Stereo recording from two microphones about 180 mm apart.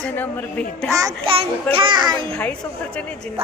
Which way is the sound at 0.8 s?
20° right (ahead or behind).